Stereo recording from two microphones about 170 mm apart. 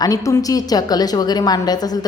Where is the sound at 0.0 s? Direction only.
20° left (ahead or behind).